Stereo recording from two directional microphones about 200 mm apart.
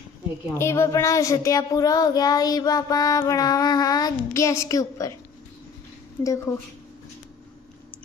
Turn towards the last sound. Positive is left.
turn(degrees=15)  # may be behind; listen again after turning